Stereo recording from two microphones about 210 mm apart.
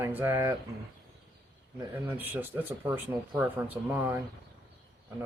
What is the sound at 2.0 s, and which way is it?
Speech, 10° right (ahead or behind).